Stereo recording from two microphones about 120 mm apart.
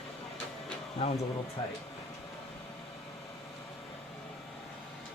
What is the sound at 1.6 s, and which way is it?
Speech, 45° left (ahead or behind).